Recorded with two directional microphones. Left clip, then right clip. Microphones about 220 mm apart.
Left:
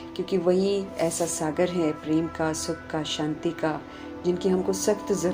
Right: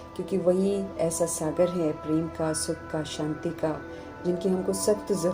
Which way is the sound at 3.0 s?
20° left (ahead or behind).